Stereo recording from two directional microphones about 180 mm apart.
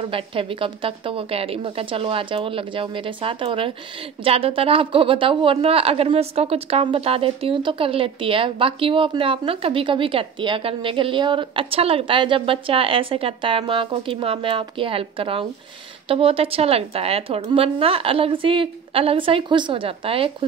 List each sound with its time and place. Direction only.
0.0 s a woman's voice: 30° right (ahead or behind)